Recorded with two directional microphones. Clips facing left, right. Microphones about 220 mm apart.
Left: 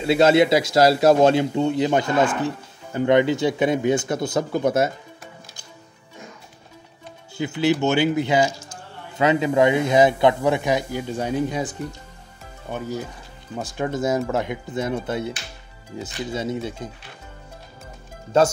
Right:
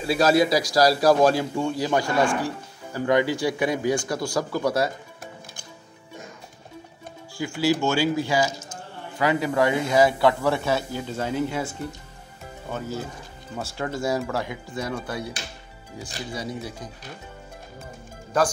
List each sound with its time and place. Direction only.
0.0 s a man's voice: 25° left (ahead or behind)
7.3 s a man's voice: 20° left (ahead or behind)
12.7 s a man's voice: 15° left (ahead or behind)
18.3 s a man's voice: 25° left (ahead or behind)